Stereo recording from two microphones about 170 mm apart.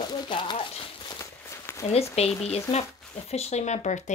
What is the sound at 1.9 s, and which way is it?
Speech, 35° left (ahead or behind).